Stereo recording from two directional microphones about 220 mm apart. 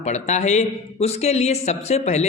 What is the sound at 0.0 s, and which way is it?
A man's voice, 30° left (ahead or behind).